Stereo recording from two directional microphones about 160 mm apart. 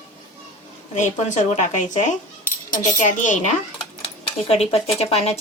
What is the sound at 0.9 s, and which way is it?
A woman's voice, 50° left (ahead or behind).